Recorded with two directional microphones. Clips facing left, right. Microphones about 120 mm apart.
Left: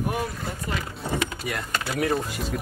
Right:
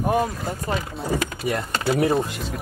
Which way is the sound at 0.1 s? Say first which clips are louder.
Right 7 dB; 30° right (ahead or behind).